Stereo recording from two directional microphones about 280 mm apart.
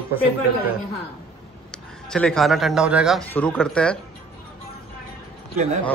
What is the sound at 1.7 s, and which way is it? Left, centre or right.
Speech, centre.